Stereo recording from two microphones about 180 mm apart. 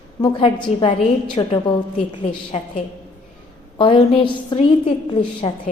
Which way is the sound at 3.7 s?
30° left (ahead or behind).